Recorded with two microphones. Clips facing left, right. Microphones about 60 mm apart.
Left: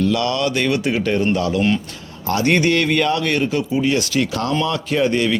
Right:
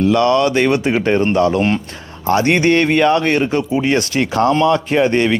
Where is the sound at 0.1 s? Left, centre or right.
Right.